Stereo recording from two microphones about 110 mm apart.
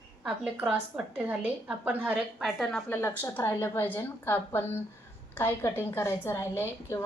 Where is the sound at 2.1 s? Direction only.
Centre (ahead or behind).